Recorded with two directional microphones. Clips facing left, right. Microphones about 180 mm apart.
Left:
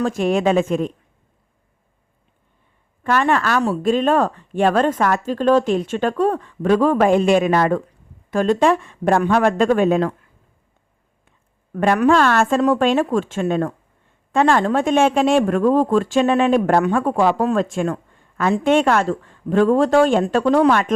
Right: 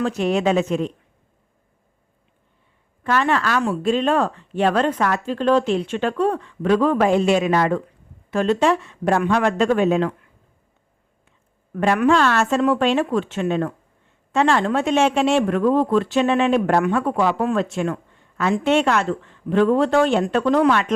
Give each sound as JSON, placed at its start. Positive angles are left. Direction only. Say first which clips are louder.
{"t": 0.0, "sound": "speech", "louder": "left 2 dB", "side_deg": 45}
{"t": 3.0, "sound": "speech", "louder": "left 2 dB", "side_deg": 45}
{"t": 11.7, "sound": "speech", "louder": "left 2 dB", "side_deg": 45}